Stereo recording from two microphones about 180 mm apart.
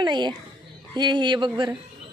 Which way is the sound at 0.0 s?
25° right (ahead or behind).